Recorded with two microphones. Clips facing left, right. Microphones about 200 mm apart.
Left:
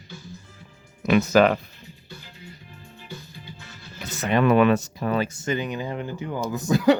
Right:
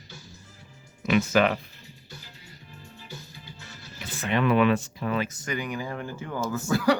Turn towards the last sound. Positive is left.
turn(degrees=20)  # may be behind; listen again after turning